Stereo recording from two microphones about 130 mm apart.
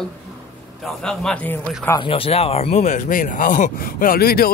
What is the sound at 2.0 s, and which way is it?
Speech, 45° left (ahead or behind).